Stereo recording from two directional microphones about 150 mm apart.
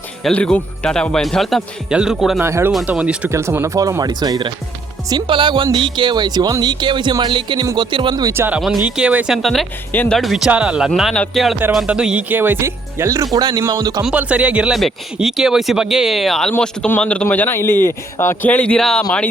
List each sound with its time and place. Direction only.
0.2 s speech: 5° left (ahead or behind)
2.4 s speech: 15° right (ahead or behind)
14.0 s a man's voice: 10° right (ahead or behind)